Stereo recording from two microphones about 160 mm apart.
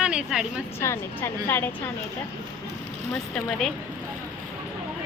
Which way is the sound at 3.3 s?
5° left (ahead or behind).